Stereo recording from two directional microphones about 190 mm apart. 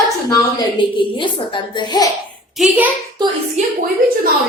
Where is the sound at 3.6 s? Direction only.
35° right (ahead or behind).